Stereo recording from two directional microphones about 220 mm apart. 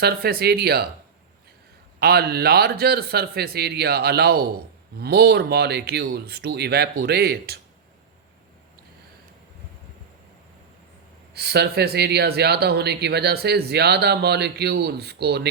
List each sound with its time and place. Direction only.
0.0 s speech: 45° right (ahead or behind)
2.0 s speech: 45° right (ahead or behind)
11.3 s speech: 45° right (ahead or behind)